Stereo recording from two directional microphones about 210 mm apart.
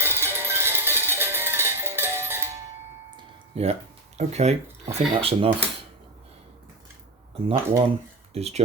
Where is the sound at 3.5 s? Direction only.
30° right (ahead or behind).